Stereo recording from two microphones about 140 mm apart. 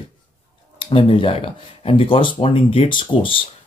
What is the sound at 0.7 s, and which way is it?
Speech, 40° left (ahead or behind).